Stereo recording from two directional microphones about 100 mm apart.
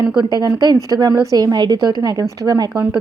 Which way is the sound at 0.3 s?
40° right (ahead or behind).